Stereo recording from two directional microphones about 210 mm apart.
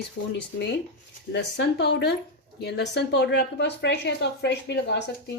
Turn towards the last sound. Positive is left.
turn(degrees=55)  # may be behind; listen again after turning